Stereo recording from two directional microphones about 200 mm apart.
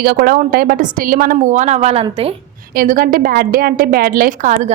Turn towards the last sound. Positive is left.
turn(degrees=-40)  # may be behind; listen again after turning